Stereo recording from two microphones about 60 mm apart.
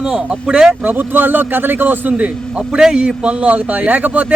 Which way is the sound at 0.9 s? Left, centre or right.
Right.